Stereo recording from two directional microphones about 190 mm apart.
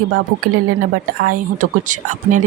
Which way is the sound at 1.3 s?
45° right (ahead or behind).